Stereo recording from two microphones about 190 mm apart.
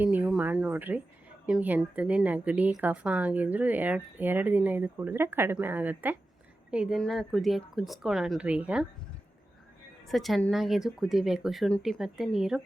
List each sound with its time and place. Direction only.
0.0 s a woman's voice: 10° right (ahead or behind)
10.1 s speech: centre (ahead or behind)